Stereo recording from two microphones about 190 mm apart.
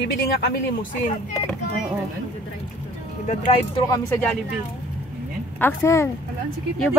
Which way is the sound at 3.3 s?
35° left (ahead or behind).